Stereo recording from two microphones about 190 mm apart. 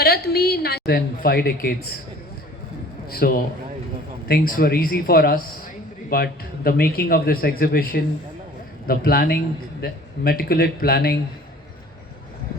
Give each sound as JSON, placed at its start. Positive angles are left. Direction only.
{"t": 0.0, "sound": "a woman's voice", "side_deg": 55}
{"t": 3.1, "sound": "a man's voice", "side_deg": 55}